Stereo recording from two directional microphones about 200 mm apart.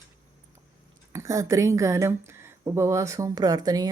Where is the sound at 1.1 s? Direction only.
15° right (ahead or behind).